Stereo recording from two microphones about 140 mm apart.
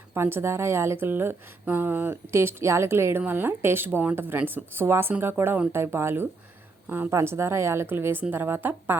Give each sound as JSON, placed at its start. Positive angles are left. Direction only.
{"t": 0.1, "sound": "a woman's voice", "side_deg": -15}